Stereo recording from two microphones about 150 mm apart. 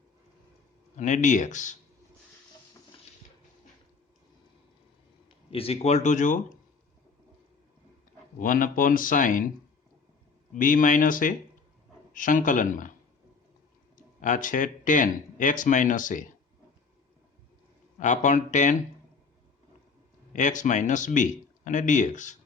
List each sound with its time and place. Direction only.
0.9 s speech: 55° left (ahead or behind)
5.5 s speech: 40° left (ahead or behind); by 6.6 s 60° left (ahead or behind)
8.4 s speech: 65° left (ahead or behind)
10.5 s speech: 65° left (ahead or behind)
13.9 s speech: 60° left (ahead or behind)
18.0 s speech: 55° left (ahead or behind)
20.3 s speech: 55° left (ahead or behind)